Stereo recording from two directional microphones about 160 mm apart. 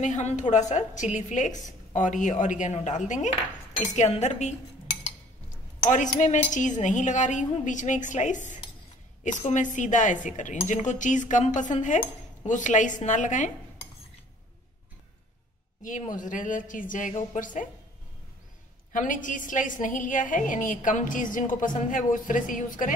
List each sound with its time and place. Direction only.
0.0 s a woman's voice: 50° left (ahead or behind)
5.9 s a woman's voice: 50° left (ahead or behind)
16.2 s a woman's voice: 55° left (ahead or behind)
18.9 s a woman's voice: 55° left (ahead or behind)